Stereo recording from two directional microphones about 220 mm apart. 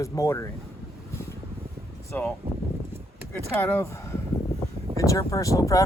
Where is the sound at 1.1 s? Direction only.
10° left (ahead or behind).